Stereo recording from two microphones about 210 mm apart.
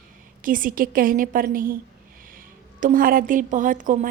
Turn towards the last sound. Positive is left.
turn(degrees=-40)  # may be behind; listen again after turning